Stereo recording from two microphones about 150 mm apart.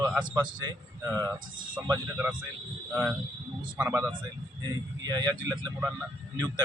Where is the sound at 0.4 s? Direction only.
25° right (ahead or behind); by 4.1 s 10° right (ahead or behind).